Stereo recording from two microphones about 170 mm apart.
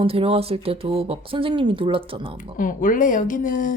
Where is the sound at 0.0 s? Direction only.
35° right (ahead or behind).